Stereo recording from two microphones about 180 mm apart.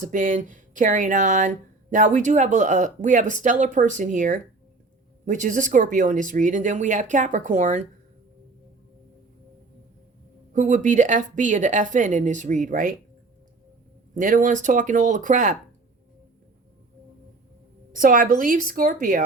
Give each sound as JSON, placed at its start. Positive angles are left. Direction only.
{"t": 0.0, "sound": "speech", "side_deg": -45}
{"t": 10.5, "sound": "speech", "side_deg": -45}
{"t": 14.2, "sound": "speech", "side_deg": -45}
{"t": 17.9, "sound": "speech", "side_deg": -50}